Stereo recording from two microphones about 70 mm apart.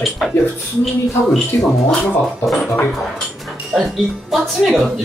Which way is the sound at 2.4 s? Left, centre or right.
Centre.